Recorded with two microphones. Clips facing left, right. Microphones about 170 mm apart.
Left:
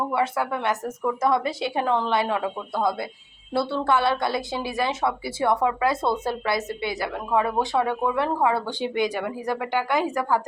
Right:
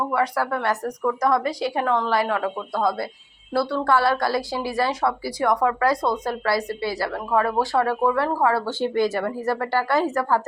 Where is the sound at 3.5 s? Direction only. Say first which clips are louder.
Right 2 dB; 25° left (ahead or behind).